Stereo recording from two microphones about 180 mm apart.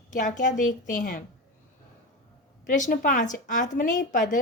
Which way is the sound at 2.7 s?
45° left (ahead or behind).